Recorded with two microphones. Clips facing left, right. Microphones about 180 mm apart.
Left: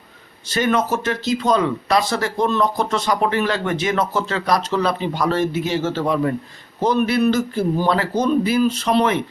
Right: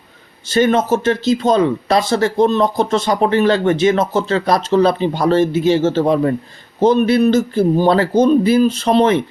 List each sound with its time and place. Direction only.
0.4 s speech: 25° right (ahead or behind)